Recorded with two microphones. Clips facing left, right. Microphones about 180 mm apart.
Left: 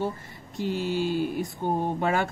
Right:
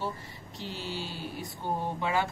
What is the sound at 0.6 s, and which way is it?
Mantra, 50° left (ahead or behind).